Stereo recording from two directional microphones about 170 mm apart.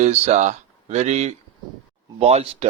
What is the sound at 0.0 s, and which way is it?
Speech, 40° right (ahead or behind).